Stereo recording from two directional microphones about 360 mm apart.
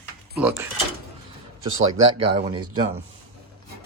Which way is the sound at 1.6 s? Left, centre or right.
Right.